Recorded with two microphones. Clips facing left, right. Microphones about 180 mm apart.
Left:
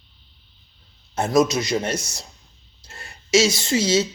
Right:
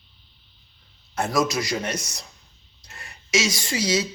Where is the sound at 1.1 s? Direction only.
20° left (ahead or behind).